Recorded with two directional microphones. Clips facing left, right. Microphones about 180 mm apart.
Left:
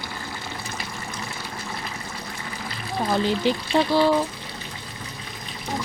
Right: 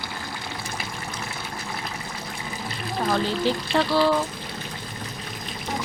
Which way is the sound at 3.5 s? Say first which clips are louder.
Left 1 dB; 15° left (ahead or behind).